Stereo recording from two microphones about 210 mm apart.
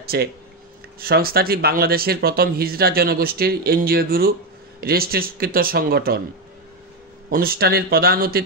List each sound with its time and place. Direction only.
0.0 s speech: 45° right (ahead or behind)
7.2 s speech: 45° right (ahead or behind)